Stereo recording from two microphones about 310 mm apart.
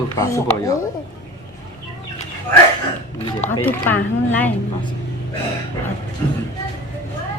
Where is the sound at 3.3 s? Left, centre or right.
Centre.